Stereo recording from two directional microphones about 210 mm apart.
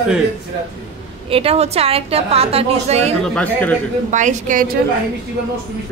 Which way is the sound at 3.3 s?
5° left (ahead or behind).